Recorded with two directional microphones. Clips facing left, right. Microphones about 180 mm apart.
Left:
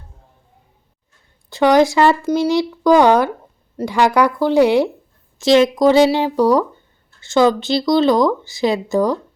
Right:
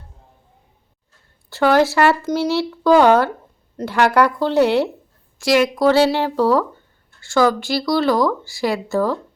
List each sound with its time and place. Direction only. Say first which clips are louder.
1.5 s speech: left 2 dB; 15° left (ahead or behind)
5.4 s speech: left 4 dB; 25° left (ahead or behind)